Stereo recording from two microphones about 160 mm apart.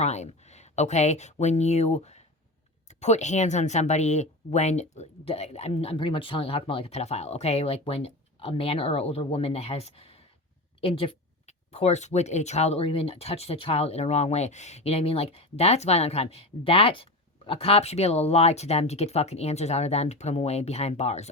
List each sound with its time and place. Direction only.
0.0 s speech: 45° left (ahead or behind)